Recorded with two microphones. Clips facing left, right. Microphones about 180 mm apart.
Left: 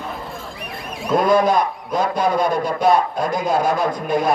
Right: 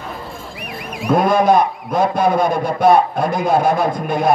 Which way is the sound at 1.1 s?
55° right (ahead or behind).